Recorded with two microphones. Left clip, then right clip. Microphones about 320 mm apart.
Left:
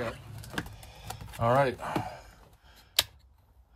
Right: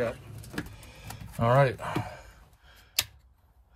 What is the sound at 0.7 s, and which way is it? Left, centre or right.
Typing, centre.